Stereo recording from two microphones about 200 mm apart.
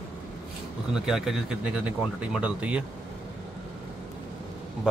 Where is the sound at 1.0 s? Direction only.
Centre (ahead or behind).